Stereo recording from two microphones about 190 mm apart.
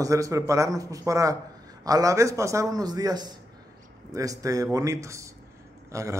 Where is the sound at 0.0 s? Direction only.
15° right (ahead or behind).